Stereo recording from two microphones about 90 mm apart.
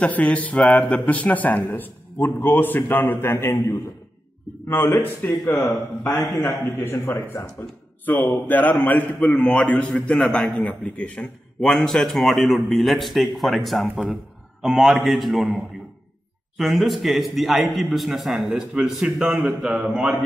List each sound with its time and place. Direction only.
0.0 s a man's voice: 15° left (ahead or behind)
5.4 s a man's voice: 5° left (ahead or behind)
6.4 s a man's voice: 25° left (ahead or behind)
8.0 s a man's voice: 20° left (ahead or behind); by 20.2 s 5° right (ahead or behind)